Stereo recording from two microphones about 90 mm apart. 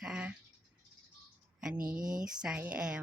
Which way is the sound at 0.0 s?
10° right (ahead or behind).